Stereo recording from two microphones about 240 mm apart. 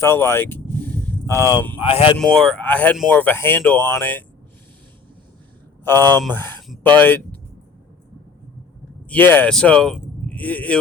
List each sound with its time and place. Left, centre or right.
0.0 s speech: centre
1.8 s speech: left
2.1 s speech: centre
5.8 s speech: centre
9.0 s speech: centre